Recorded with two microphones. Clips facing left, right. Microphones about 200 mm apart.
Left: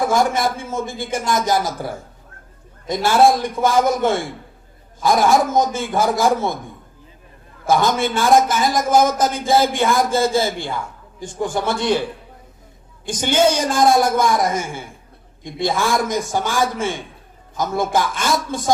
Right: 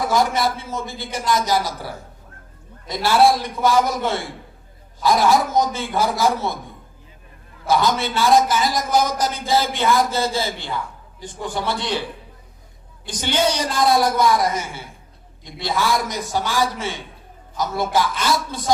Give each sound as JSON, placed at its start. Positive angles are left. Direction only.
{"t": 0.0, "sound": "a man's voice", "side_deg": 50}
{"t": 7.7, "sound": "a man's voice", "side_deg": 50}
{"t": 13.1, "sound": "a man's voice", "side_deg": 50}